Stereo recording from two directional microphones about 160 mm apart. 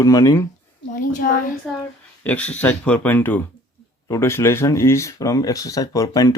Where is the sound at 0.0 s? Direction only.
20° left (ahead or behind).